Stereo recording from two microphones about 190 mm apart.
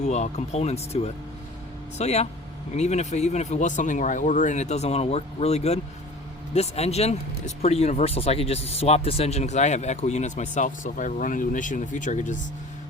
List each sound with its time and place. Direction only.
0.0 s speech: 35° left (ahead or behind)